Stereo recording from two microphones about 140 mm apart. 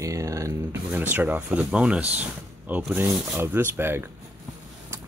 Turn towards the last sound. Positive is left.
turn(degrees=-15)  # may be behind; listen again after turning